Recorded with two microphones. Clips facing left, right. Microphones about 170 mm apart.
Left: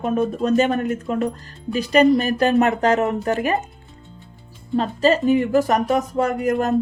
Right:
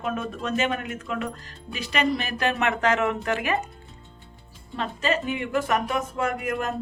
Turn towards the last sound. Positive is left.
turn(degrees=40)  # may be behind; listen again after turning